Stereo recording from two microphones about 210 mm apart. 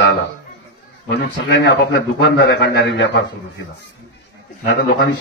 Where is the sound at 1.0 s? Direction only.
55° left (ahead or behind).